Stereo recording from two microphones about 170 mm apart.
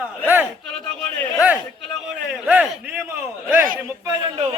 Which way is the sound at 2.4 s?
10° right (ahead or behind).